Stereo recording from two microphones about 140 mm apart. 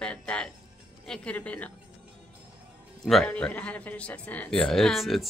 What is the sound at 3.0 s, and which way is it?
A man's voice, 5° left (ahead or behind).